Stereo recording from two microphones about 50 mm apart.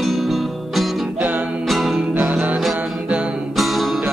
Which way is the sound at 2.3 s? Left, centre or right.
Centre.